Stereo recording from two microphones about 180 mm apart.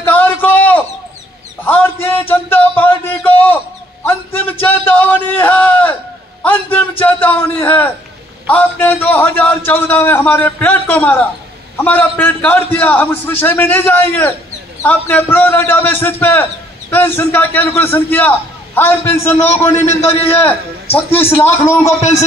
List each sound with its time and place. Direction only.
0.0 s a sound: 10° left (ahead or behind)
8.5 s a man's voice: 10° left (ahead or behind)
19.4 s a man's voice: 40° left (ahead or behind)
21.5 s a man's voice: 15° left (ahead or behind)